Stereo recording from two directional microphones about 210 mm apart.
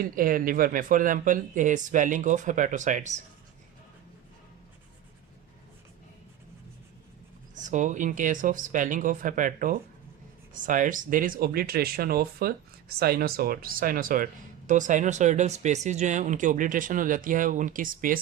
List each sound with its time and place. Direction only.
0.0 s speech: 40° right (ahead or behind)
7.5 s speech: 35° right (ahead or behind)